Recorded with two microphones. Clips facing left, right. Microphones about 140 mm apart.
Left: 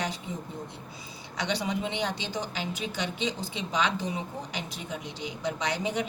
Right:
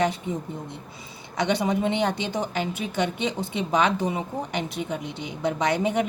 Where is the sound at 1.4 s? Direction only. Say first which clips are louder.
Right 7 dB; 50° right (ahead or behind).